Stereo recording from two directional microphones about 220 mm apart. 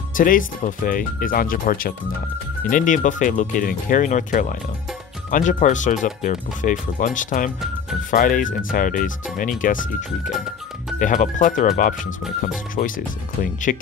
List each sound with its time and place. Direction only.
0.1 s speech: 40° left (ahead or behind)